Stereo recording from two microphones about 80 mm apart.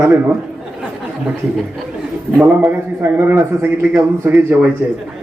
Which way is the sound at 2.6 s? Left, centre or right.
Right.